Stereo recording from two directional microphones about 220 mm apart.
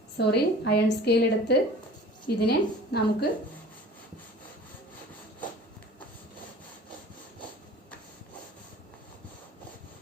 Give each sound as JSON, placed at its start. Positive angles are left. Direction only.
{"t": 0.2, "sound": "a woman's voice", "side_deg": 50}